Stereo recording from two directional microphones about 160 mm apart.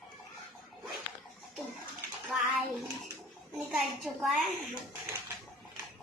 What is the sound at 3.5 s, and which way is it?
Speech, 5° right (ahead or behind).